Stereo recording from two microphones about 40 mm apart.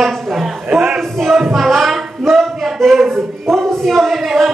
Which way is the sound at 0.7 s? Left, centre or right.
Right.